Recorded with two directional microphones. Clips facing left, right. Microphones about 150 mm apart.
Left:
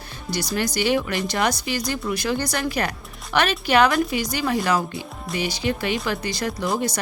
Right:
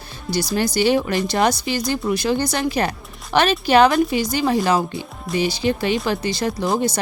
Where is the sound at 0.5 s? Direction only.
30° right (ahead or behind).